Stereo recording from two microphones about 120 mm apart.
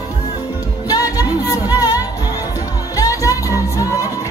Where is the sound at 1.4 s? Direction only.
30° left (ahead or behind).